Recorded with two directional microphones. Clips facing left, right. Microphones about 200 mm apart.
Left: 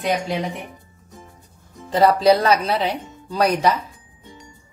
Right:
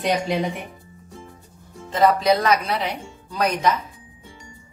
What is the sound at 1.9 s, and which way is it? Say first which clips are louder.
A woman's voice: left 3 dB; 35° left (ahead or behind).